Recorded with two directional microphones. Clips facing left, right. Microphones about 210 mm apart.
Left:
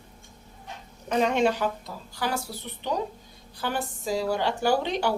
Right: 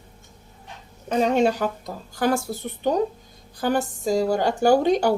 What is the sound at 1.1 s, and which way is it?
A woman's voice, 35° right (ahead or behind).